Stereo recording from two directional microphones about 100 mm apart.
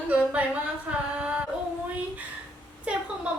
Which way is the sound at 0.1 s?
15° right (ahead or behind).